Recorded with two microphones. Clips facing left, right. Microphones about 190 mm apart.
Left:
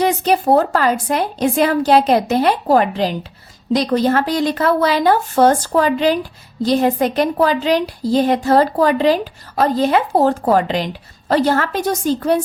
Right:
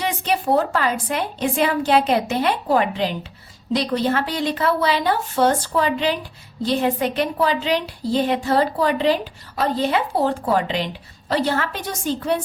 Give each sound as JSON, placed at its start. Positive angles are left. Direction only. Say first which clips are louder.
{"t": 0.0, "sound": "a woman's voice", "louder": "left 7 dB", "side_deg": 40}